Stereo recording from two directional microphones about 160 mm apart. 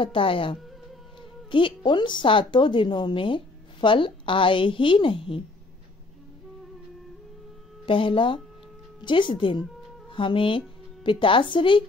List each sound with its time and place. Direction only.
0.0 s speech: 35° left (ahead or behind)
7.8 s speech: 35° left (ahead or behind)